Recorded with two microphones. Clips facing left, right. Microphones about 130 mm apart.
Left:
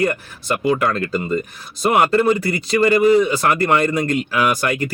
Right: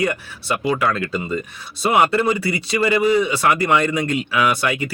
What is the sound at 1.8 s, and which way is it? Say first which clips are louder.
Speech: left 1 dB; 5° right (ahead or behind).